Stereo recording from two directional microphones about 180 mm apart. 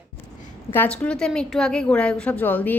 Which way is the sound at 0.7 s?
10° left (ahead or behind).